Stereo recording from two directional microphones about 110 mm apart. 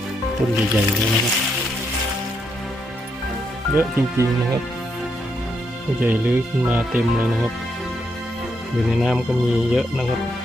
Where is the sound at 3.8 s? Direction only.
20° right (ahead or behind).